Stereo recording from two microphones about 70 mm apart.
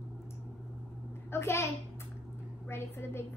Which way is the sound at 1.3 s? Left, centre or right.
Left.